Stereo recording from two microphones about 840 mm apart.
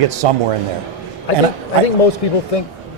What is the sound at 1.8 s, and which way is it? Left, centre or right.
Speech, left.